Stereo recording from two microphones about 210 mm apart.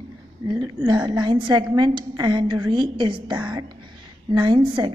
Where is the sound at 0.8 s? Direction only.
20° right (ahead or behind).